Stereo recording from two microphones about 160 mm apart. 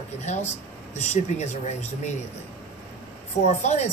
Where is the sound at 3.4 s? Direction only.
45° left (ahead or behind).